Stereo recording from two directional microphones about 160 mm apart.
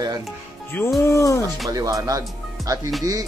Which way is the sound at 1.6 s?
20° right (ahead or behind).